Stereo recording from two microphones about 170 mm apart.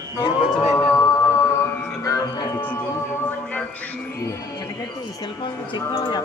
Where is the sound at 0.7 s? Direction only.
15° left (ahead or behind).